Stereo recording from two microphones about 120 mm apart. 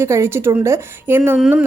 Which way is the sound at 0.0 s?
20° right (ahead or behind).